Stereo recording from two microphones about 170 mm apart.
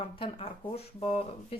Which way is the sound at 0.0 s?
35° left (ahead or behind).